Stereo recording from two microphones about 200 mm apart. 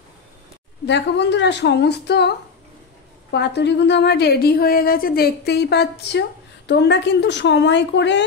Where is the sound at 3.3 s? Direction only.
55° left (ahead or behind).